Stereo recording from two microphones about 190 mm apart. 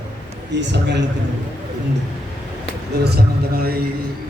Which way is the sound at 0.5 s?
65° right (ahead or behind).